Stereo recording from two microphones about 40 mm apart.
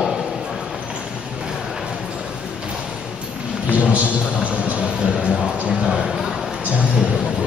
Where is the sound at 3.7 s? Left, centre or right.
Right.